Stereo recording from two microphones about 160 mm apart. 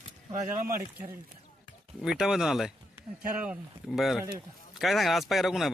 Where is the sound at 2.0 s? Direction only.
5° right (ahead or behind).